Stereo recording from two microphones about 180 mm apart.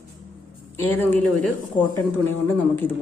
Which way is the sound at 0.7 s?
10° left (ahead or behind).